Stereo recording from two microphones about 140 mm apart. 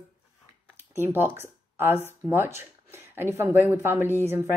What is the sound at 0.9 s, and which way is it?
Speech, 15° right (ahead or behind).